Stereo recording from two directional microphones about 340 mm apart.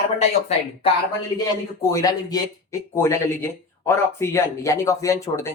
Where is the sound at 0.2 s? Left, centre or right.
Centre.